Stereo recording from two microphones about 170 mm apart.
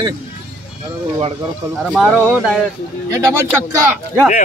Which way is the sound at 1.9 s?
10° right (ahead or behind).